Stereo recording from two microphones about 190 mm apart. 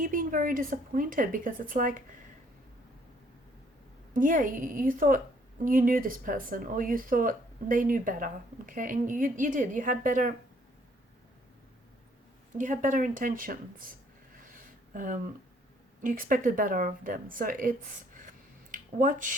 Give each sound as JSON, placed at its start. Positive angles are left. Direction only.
{"t": 0.0, "sound": "speech", "side_deg": -45}
{"t": 4.1, "sound": "speech", "side_deg": -45}
{"t": 12.5, "sound": "speech", "side_deg": -45}
{"t": 14.3, "sound": "a sound", "side_deg": -45}
{"t": 16.0, "sound": "speech", "side_deg": -45}